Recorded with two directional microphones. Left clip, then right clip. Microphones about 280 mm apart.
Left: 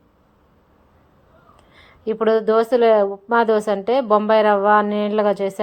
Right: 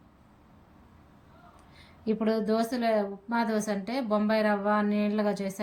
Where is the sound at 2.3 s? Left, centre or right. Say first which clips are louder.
Left 13 dB; centre.